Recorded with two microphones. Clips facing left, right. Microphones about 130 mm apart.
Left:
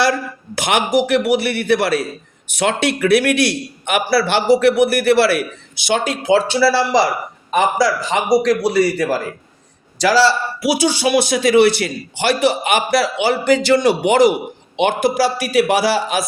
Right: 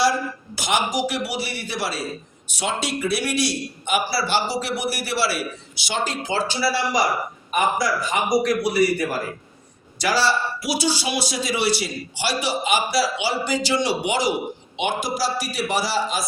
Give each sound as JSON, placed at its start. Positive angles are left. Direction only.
{"t": 0.0, "sound": "a man's voice", "side_deg": 65}